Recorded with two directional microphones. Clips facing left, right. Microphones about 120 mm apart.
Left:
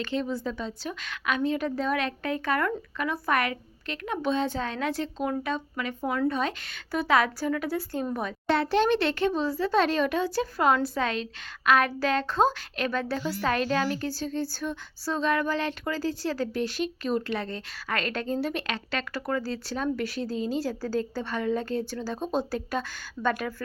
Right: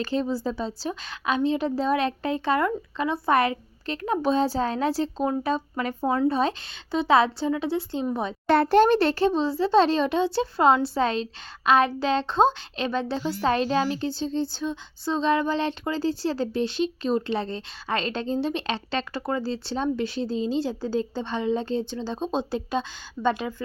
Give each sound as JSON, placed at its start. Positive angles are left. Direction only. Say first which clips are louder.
{"t": 0.0, "sound": "a woman's voice", "louder": "right 3 dB", "side_deg": -35}
{"t": 8.4, "sound": "a woman's voice", "louder": "right 5 dB", "side_deg": -50}